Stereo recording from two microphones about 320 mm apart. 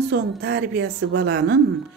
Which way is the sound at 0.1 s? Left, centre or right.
Right.